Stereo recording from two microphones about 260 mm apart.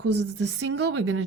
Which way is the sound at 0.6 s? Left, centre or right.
Right.